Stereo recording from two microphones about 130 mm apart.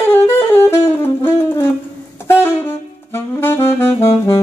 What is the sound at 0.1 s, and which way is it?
Saxophone, 20° left (ahead or behind).